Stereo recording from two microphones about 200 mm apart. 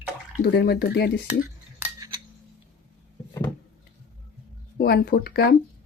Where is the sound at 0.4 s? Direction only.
55° left (ahead or behind).